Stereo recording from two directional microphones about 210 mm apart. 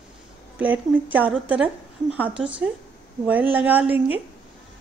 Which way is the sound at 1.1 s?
5° right (ahead or behind).